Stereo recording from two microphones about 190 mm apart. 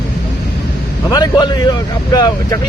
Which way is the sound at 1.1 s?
20° left (ahead or behind).